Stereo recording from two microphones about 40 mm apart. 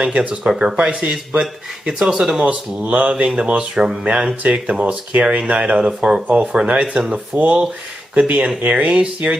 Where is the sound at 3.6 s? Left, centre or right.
Right.